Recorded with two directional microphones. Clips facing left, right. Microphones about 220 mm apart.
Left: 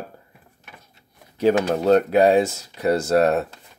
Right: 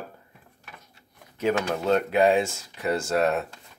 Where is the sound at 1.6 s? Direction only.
40° left (ahead or behind).